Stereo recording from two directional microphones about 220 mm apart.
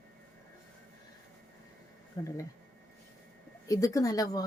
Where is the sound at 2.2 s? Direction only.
20° left (ahead or behind).